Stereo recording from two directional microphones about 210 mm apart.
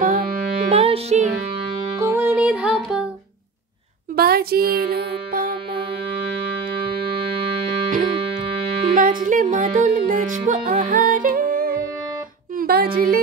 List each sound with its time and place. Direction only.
0.0 s music: 40° right (ahead or behind)
0.7 s music: 30° right (ahead or behind)
2.0 s music: 10° right (ahead or behind)
4.2 s music: 45° right (ahead or behind)
8.9 s music: 40° right (ahead or behind)